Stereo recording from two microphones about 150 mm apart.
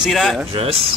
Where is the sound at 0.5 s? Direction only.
40° right (ahead or behind).